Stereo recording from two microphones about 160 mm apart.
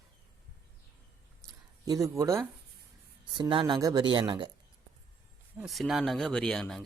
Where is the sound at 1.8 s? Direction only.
20° right (ahead or behind).